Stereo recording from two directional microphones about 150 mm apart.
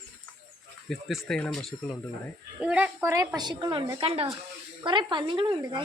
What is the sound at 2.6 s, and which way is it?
A woman's voice, 10° right (ahead or behind).